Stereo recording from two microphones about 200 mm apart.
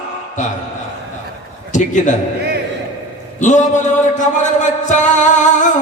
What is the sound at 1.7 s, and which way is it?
Speech, 40° left (ahead or behind).